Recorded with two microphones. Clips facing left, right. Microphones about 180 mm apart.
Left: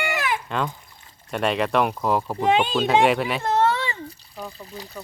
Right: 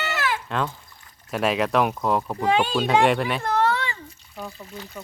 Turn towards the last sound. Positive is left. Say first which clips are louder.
# left 2 dB
turn(degrees=25)  # may be behind; listen again after turning